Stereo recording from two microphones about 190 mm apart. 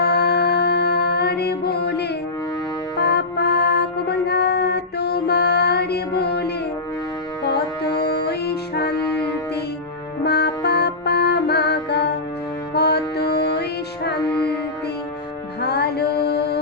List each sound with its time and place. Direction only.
0.0 s music: 60° left (ahead or behind)
10.2 s music: 60° left (ahead or behind)
15.6 s music: 60° left (ahead or behind)